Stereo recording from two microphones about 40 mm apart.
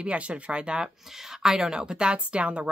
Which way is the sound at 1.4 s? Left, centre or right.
Centre.